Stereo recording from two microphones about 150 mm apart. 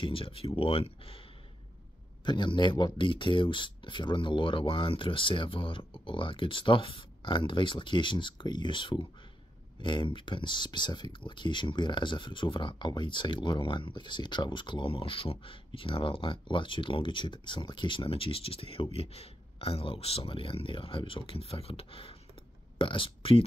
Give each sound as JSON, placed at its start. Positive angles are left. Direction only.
{"t": 0.0, "sound": "speech", "side_deg": 35}
{"t": 2.2, "sound": "speech", "side_deg": 30}